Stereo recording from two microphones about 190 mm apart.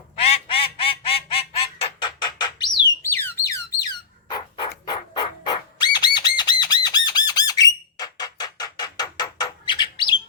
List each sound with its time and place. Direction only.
0.2 s goose: 30° left (ahead or behind)
3.0 s a sound: 10° left (ahead or behind)
4.9 s bird: 20° left (ahead or behind)
7.3 s squawk: 20° left (ahead or behind)